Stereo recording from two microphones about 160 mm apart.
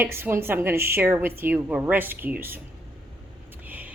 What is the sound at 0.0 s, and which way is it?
Speech, 15° right (ahead or behind).